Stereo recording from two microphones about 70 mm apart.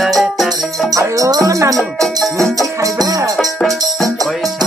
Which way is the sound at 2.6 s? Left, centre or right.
Right.